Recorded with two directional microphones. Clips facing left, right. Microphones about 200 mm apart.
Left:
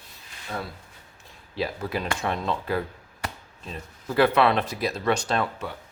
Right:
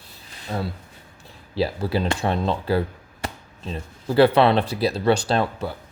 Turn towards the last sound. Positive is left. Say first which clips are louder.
# right 4 dB
turn(degrees=-35)  # may be behind; listen again after turning